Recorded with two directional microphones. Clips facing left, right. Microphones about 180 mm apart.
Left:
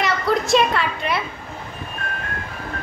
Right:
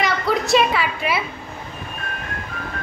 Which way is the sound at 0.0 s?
Centre (ahead or behind).